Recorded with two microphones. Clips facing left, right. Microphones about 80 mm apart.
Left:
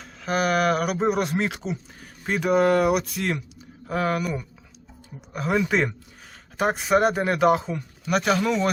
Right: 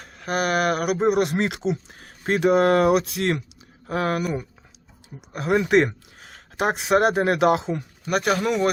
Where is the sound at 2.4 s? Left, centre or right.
Right.